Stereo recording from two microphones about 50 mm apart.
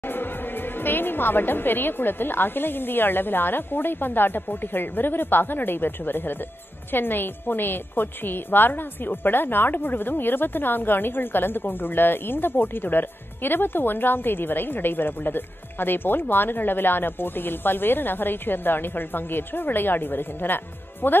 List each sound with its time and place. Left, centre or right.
0.0 s a woman's voice: left